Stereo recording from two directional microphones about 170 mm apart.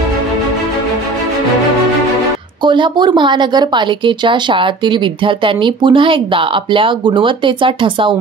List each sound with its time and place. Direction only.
2.6 s a woman's voice: 25° right (ahead or behind)